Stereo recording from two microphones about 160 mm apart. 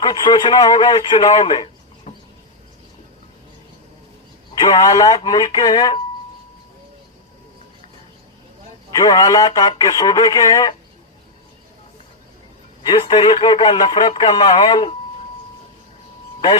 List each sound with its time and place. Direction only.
0.0 s speech: 30° left (ahead or behind)
2.1 s a sound: 50° left (ahead or behind)
4.5 s speech: 25° left (ahead or behind)
8.9 s speech: 20° left (ahead or behind)
12.8 s speech: 30° left (ahead or behind)